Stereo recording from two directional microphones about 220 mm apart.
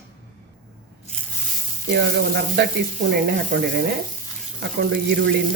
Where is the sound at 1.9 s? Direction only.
50° right (ahead or behind).